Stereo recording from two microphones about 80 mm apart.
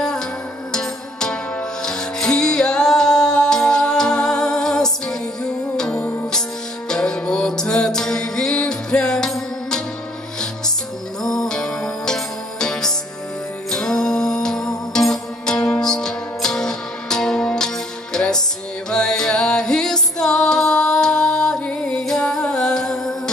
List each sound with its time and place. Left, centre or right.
0.7 s music: centre
5.9 s music: left
6.9 s music: centre
11.2 s music: centre